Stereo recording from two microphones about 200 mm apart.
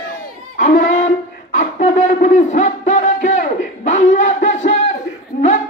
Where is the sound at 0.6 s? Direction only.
40° left (ahead or behind).